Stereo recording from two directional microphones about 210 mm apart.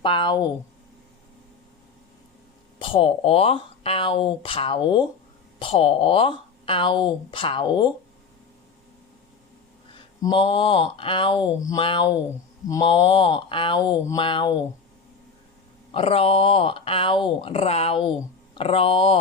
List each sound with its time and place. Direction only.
0.0 s speech: 25° left (ahead or behind)
2.7 s speech: 25° left (ahead or behind)
9.9 s speech: 20° left (ahead or behind)
15.9 s speech: 25° left (ahead or behind)